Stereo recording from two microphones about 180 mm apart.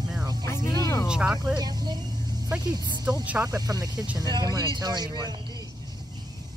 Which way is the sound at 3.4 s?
20° right (ahead or behind).